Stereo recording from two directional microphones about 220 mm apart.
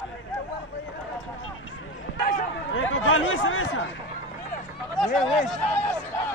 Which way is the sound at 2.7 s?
65° left (ahead or behind).